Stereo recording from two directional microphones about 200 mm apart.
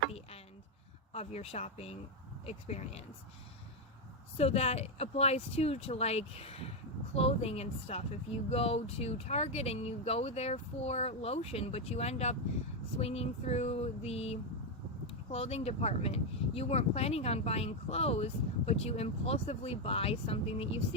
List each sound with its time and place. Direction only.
1.1 s speech: 30° left (ahead or behind)
4.4 s speech: 30° left (ahead or behind)